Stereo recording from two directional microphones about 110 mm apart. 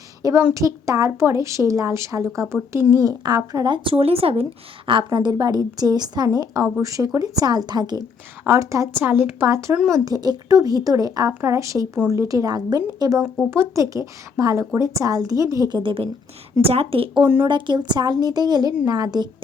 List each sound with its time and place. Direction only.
0.2 s a woman's voice: 30° right (ahead or behind)
3.8 s a woman's voice: 60° right (ahead or behind)
4.9 s speech: 45° right (ahead or behind)
8.4 s a woman's voice: 30° right (ahead or behind)
9.0 s a woman's voice: 20° right (ahead or behind); by 11.3 s 35° right (ahead or behind)
11.3 s a woman's voice: 20° right (ahead or behind)
15.8 s a woman's voice: 50° right (ahead or behind)
16.6 s a woman's voice: 60° right (ahead or behind)
17.2 s a woman's voice: 20° right (ahead or behind)
17.5 s speech: 45° right (ahead or behind)